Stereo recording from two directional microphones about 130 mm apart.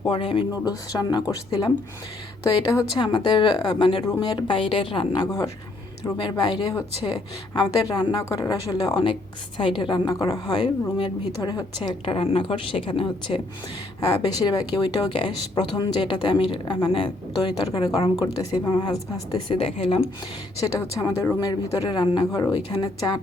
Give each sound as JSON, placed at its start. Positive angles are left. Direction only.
{"t": 0.0, "sound": "speech", "side_deg": 45}
{"t": 0.5, "sound": "speech", "side_deg": 30}
{"t": 14.4, "sound": "speech", "side_deg": 35}
{"t": 19.5, "sound": "speech", "side_deg": 45}
{"t": 20.6, "sound": "speech", "side_deg": 25}